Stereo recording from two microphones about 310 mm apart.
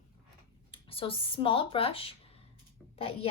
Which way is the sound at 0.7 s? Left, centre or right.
Centre.